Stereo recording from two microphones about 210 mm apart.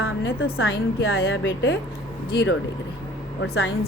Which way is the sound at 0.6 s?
65° left (ahead or behind).